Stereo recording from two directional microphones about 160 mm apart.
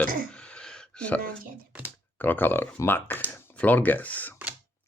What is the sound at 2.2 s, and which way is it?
Speech, 10° left (ahead or behind).